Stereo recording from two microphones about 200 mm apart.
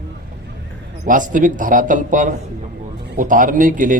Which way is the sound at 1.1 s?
40° right (ahead or behind).